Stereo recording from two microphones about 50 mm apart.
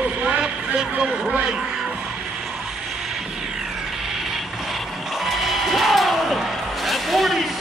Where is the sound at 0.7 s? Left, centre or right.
Centre.